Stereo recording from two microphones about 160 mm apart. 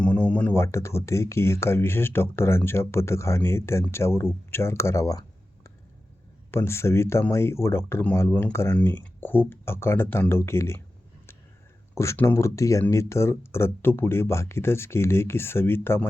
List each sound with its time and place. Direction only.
0.0 s speech: 10° left (ahead or behind)
6.5 s speech: 15° left (ahead or behind)
11.9 s speech: 15° left (ahead or behind)